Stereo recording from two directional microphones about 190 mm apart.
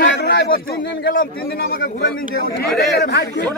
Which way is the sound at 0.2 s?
50° left (ahead or behind).